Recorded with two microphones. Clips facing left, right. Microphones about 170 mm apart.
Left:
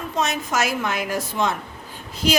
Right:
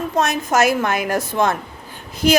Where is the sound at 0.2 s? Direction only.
50° right (ahead or behind).